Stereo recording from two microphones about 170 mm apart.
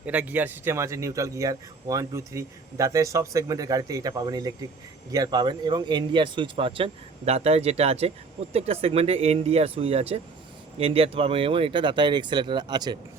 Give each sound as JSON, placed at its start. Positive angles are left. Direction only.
{"t": 0.0, "sound": "speech", "side_deg": -10}